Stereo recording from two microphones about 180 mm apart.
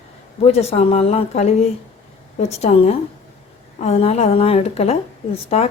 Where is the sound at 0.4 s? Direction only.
35° left (ahead or behind).